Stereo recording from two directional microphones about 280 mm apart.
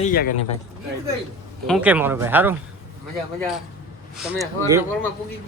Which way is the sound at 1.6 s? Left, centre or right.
Centre.